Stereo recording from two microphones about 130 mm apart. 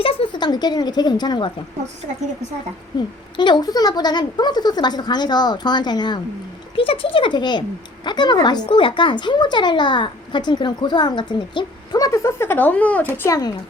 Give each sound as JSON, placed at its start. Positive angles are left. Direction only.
{"t": 0.0, "sound": "a woman's voice", "side_deg": 45}
{"t": 2.9, "sound": "speech", "side_deg": 30}